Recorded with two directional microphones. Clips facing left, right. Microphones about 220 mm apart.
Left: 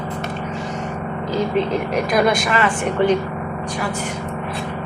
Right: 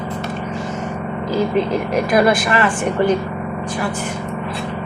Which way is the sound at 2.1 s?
5° right (ahead or behind).